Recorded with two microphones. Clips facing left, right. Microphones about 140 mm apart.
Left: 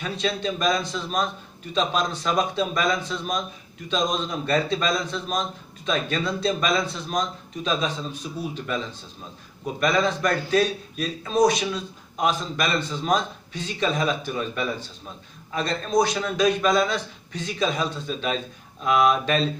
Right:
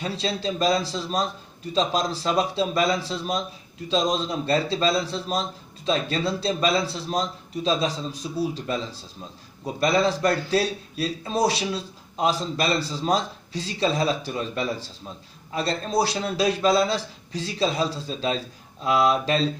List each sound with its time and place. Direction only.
0.0 s a man's voice: 30° right (ahead or behind)